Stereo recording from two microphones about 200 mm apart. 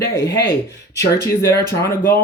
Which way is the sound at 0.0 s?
15° left (ahead or behind).